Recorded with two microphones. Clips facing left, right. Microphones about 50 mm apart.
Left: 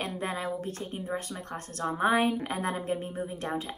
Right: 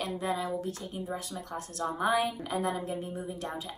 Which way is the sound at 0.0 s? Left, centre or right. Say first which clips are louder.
Right 1 dB; left.